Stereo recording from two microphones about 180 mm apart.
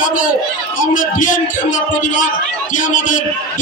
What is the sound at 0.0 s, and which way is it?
A man's voice, 50° left (ahead or behind).